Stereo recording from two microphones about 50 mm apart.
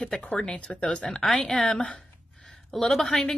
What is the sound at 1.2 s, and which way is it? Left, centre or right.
Speech, centre.